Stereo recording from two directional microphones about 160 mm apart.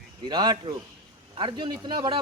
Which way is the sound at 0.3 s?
30° right (ahead or behind).